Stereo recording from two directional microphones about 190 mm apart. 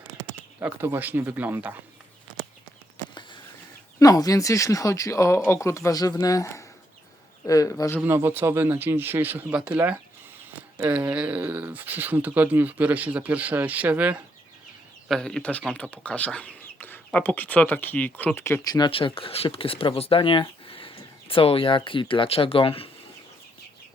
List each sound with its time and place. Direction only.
0.6 s speech: 10° right (ahead or behind)
4.0 s speech: 20° left (ahead or behind)
8.0 s speech: 10° right (ahead or behind); by 22.9 s 30° left (ahead or behind)